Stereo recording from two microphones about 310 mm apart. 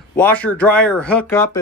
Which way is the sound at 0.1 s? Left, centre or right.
Centre.